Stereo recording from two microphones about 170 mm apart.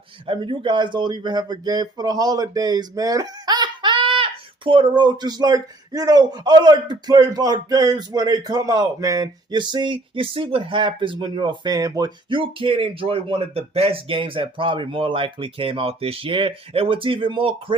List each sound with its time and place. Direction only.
0.3 s speech: 30° right (ahead or behind)